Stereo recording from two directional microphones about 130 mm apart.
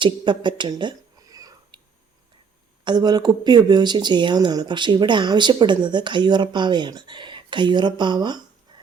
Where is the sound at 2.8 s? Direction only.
35° right (ahead or behind).